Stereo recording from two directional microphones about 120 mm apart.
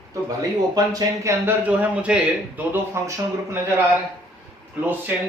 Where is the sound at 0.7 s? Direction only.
30° right (ahead or behind).